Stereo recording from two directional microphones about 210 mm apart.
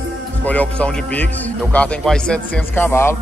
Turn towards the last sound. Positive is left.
turn(degrees=10)  # may be behind; listen again after turning